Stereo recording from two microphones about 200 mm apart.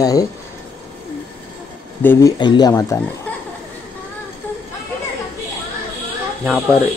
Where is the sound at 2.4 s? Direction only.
20° left (ahead or behind).